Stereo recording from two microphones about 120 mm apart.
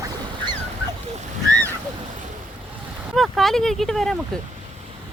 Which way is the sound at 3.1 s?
Centre (ahead or behind).